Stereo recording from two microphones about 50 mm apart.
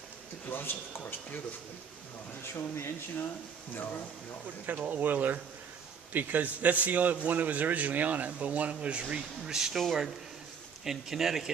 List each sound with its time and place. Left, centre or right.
0.5 s speech: left
2.6 s speech: left
3.8 s speech: left
4.8 s a man's voice: right
9.5 s speech: centre